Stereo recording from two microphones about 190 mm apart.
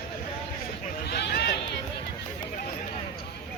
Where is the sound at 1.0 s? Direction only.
60° left (ahead or behind).